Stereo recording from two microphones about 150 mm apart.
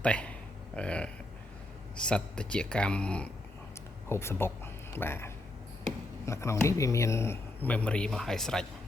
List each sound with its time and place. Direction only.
0.0 s speech: 10° left (ahead or behind)